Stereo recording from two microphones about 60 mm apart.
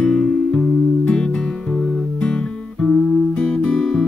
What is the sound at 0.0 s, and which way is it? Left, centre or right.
Music, centre.